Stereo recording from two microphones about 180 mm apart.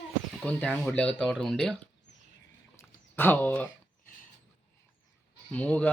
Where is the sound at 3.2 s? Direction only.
10° left (ahead or behind).